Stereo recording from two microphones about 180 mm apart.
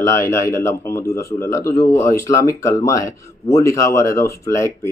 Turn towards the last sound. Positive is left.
turn(degrees=15)  # may be behind; listen again after turning